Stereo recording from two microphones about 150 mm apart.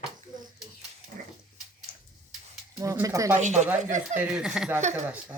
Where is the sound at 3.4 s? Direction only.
50° right (ahead or behind).